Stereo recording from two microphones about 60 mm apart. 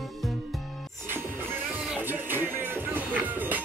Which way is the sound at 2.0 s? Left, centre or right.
Right.